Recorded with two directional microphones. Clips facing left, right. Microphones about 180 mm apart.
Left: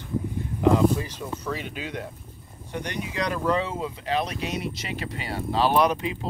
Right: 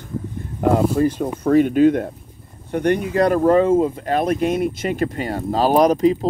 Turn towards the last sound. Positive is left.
turn(degrees=-40)  # may be behind; listen again after turning